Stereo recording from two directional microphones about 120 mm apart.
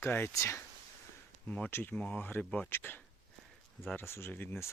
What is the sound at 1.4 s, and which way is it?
Speech, 10° left (ahead or behind).